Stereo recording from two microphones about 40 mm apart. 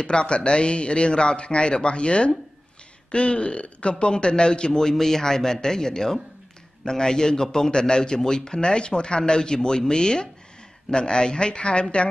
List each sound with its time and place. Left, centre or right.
0.0 s a man's voice: left